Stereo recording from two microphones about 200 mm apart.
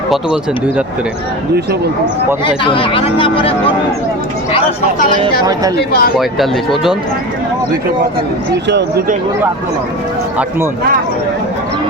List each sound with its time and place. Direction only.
2.6 s speech: 25° left (ahead or behind)
5.7 s speech: 50° left (ahead or behind)
6.1 s speech: centre (ahead or behind)